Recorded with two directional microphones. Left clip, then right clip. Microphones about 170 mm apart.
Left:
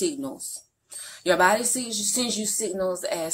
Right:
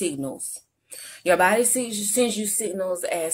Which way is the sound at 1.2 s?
40° right (ahead or behind).